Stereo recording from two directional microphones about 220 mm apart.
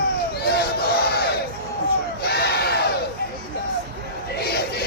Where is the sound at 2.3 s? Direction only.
45° left (ahead or behind).